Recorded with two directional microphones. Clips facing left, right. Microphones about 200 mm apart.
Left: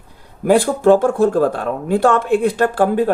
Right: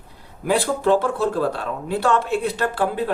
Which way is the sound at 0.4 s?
50° left (ahead or behind).